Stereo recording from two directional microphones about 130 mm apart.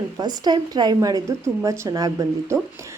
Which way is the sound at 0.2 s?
30° right (ahead or behind).